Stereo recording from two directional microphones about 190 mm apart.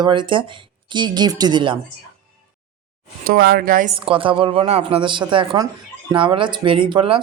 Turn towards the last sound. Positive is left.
turn(degrees=-25)  # may be behind; listen again after turning